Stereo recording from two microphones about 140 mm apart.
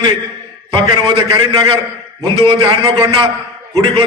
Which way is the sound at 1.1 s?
30° right (ahead or behind).